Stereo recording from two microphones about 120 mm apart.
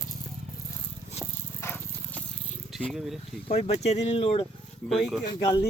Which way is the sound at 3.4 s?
65° left (ahead or behind).